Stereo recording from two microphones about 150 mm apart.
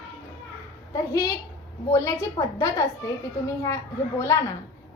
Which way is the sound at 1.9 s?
20° left (ahead or behind).